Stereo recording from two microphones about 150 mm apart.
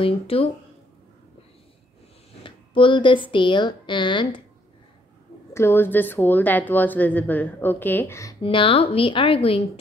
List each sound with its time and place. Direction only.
0.0 s speech: 40° left (ahead or behind)
2.4 s a woman's voice: 35° left (ahead or behind)
5.5 s speech: 15° left (ahead or behind)
8.4 s speech: 35° left (ahead or behind)